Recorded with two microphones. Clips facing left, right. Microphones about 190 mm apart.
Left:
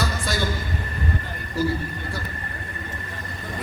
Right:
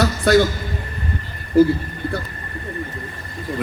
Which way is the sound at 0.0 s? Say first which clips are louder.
Right 12 dB; 65° right (ahead or behind).